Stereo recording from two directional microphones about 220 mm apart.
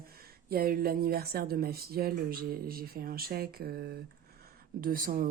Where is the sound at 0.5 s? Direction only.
40° right (ahead or behind).